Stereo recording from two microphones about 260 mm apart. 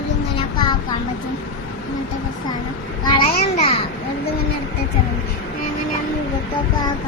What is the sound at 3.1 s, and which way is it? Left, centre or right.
Speech, left.